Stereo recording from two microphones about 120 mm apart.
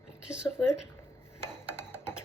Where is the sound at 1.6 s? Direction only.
20° left (ahead or behind).